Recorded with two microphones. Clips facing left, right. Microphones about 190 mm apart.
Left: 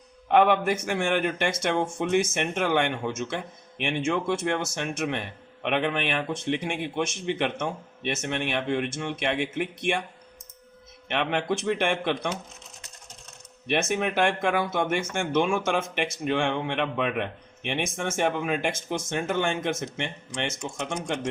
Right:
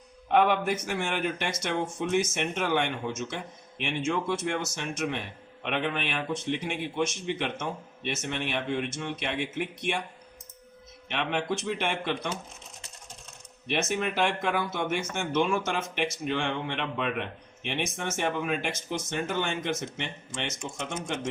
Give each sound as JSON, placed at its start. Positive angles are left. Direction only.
{"t": 0.3, "sound": "a man's voice", "side_deg": 60}
{"t": 11.1, "sound": "a man's voice", "side_deg": 55}
{"t": 13.7, "sound": "speech", "side_deg": 55}